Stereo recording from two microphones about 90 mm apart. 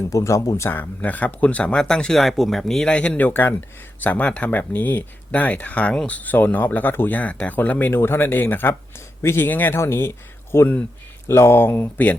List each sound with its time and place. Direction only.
0.1 s speech: 40° left (ahead or behind)
0.7 s speech: 20° left (ahead or behind)